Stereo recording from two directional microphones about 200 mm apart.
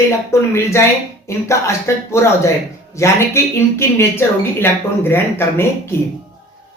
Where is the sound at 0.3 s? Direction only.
15° left (ahead or behind).